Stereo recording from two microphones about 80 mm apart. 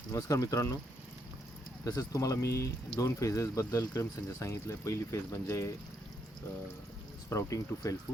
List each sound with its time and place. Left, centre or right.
0.2 s speech: left
1.8 s speech: left
7.3 s speech: left